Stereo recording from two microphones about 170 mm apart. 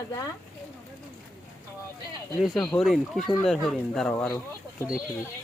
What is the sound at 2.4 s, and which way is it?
Speech, centre (ahead or behind).